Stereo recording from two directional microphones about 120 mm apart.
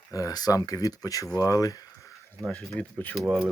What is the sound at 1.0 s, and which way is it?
Speech, 30° left (ahead or behind).